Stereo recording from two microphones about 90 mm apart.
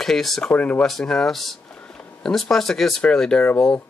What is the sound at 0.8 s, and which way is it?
Speech, 5° left (ahead or behind).